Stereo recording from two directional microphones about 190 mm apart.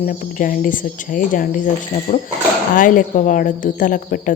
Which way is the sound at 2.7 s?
45° left (ahead or behind).